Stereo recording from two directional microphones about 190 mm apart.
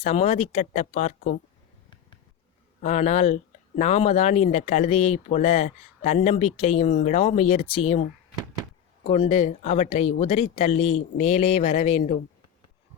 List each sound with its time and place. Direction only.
0.0 s speech: 35° left (ahead or behind)
2.8 s speech: 35° left (ahead or behind)
9.0 s speech: 30° left (ahead or behind)